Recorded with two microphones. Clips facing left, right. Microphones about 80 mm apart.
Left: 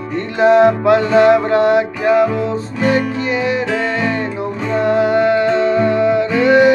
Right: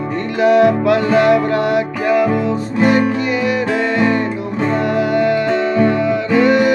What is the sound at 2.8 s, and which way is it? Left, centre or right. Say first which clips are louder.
Music: right 2 dB; right.